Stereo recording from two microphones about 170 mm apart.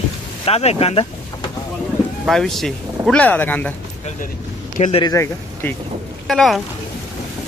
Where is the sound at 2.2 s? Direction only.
Centre (ahead or behind).